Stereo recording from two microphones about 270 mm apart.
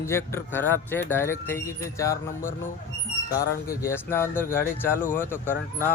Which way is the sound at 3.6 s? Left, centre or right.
Centre.